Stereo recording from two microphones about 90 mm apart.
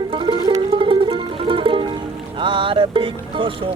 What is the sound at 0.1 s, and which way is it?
Music, 70° right (ahead or behind).